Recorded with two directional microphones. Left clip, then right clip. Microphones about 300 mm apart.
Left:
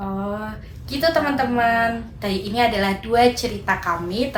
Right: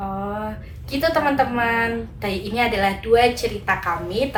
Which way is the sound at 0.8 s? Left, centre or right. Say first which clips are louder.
Even; centre.